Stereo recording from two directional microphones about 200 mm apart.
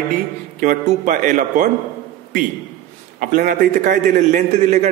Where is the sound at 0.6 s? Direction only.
40° right (ahead or behind).